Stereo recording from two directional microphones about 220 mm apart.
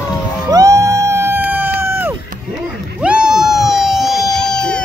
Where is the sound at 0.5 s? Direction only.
15° right (ahead or behind).